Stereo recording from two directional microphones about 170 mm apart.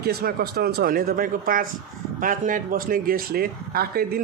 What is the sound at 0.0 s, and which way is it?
Speech, 65° right (ahead or behind).